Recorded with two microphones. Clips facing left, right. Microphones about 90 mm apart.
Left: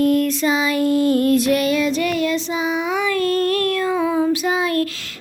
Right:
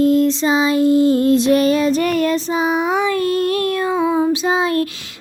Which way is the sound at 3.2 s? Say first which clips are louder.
Right 1 dB; 20° right (ahead or behind).